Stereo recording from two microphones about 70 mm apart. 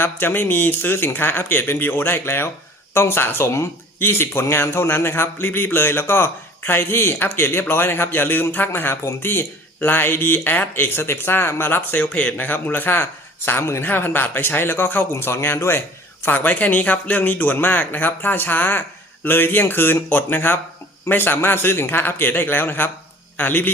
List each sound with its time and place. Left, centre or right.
0.0 s a man's voice: left
13.8 s a man's voice: left